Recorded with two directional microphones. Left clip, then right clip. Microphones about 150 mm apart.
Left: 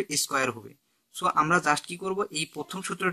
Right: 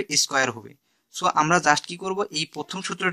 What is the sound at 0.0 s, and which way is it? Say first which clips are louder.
A woman's voice: right 5 dB; 35° right (ahead or behind).